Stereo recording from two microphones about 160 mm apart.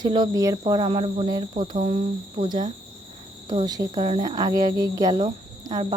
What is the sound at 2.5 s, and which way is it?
Speech, 25° right (ahead or behind).